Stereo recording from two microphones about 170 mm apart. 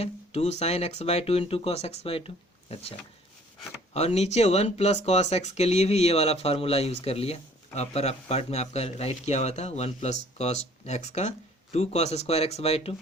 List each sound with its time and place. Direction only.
0.0 s speech: 40° left (ahead or behind)
3.9 s speech: 40° left (ahead or behind)